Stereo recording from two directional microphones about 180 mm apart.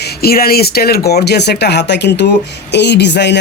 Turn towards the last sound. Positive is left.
turn(degrees=70)  # may be behind; listen again after turning